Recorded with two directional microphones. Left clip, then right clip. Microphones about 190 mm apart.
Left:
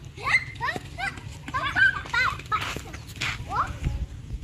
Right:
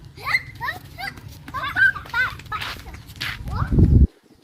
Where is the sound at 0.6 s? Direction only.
15° left (ahead or behind).